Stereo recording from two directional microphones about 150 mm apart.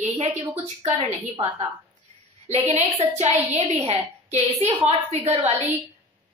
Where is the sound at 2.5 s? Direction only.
45° right (ahead or behind).